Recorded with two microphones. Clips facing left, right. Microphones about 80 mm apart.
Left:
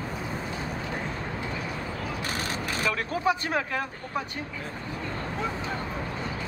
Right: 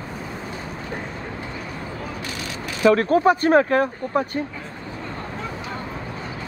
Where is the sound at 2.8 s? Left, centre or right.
Right.